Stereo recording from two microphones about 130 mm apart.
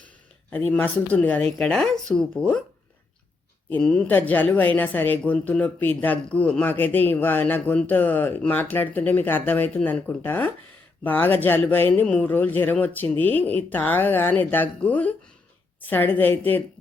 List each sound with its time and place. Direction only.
0.5 s speech: 15° left (ahead or behind)
3.7 s speech: 10° left (ahead or behind)